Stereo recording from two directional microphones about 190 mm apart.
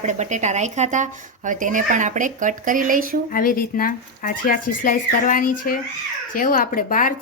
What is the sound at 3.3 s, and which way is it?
A woman's voice, 50° left (ahead or behind).